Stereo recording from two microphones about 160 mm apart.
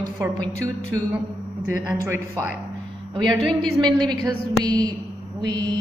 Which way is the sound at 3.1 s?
25° right (ahead or behind).